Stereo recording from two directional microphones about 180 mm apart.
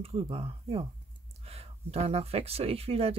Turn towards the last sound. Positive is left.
turn(degrees=-35)  # may be behind; listen again after turning